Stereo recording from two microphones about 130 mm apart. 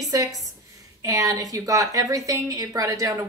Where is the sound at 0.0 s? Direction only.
30° right (ahead or behind).